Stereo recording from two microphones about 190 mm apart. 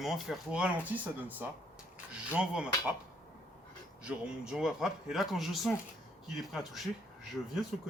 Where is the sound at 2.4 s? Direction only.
5° right (ahead or behind).